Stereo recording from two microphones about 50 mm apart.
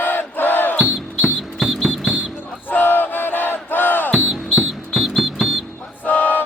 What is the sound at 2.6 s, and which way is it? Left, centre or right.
Battle cry, left.